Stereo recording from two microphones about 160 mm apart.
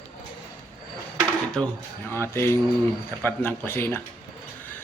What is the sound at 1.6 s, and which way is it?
Speech, 5° left (ahead or behind).